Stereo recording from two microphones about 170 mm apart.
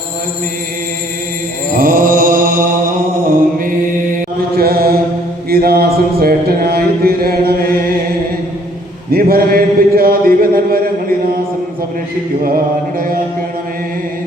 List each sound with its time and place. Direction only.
1.8 s mantra: 55° right (ahead or behind)
4.5 s mantra: 65° right (ahead or behind)
9.1 s a sound: 60° right (ahead or behind)